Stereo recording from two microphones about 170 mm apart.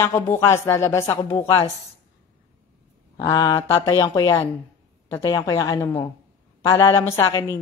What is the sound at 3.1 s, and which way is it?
A woman's voice, 20° left (ahead or behind).